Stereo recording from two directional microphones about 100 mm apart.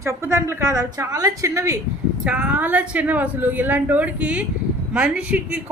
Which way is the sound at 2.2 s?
15° right (ahead or behind).